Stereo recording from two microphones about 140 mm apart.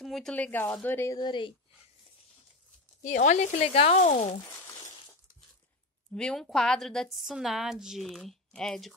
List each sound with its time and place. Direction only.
0.0 s a woman's voice: centre (ahead or behind)
1.1 s speech: 30° left (ahead or behind)
3.0 s speech: 65° left (ahead or behind)
6.1 s speech: 5° left (ahead or behind)